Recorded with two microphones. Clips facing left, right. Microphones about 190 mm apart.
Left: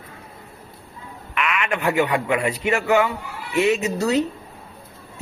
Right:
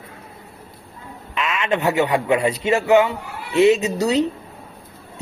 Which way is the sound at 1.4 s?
25° right (ahead or behind).